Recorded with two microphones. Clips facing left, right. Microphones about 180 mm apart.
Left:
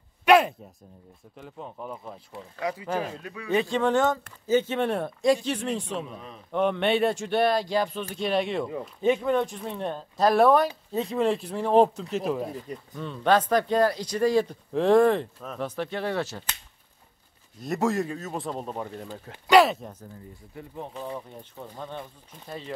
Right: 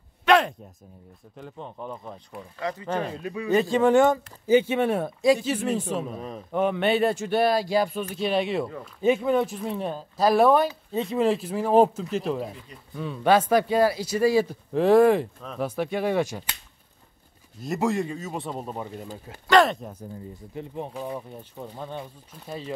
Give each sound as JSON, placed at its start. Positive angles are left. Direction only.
{"t": 0.2, "sound": "speech", "side_deg": 10}
{"t": 3.7, "sound": "speech", "side_deg": -10}
{"t": 6.0, "sound": "speech", "side_deg": -45}
{"t": 6.5, "sound": "speech", "side_deg": -5}
{"t": 17.6, "sound": "speech", "side_deg": 0}
{"t": 19.6, "sound": "speech", "side_deg": 0}
{"t": 20.5, "sound": "speech", "side_deg": -20}